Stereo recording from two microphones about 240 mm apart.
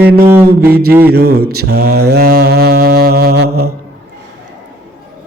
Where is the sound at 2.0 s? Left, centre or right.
Right.